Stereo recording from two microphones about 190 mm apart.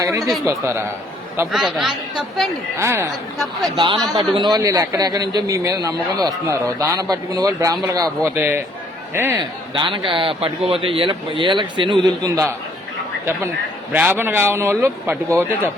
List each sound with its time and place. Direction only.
0.0 s a man's voice: 15° right (ahead or behind)
1.5 s speech: centre (ahead or behind)
2.7 s a man's voice: 15° right (ahead or behind)
3.3 s speech: centre (ahead or behind)
4.1 s a man's voice: 20° right (ahead or behind)
9.4 s a man's voice: 25° right (ahead or behind)
13.9 s a man's voice: 10° right (ahead or behind)